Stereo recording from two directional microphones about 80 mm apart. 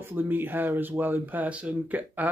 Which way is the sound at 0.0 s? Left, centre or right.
Right.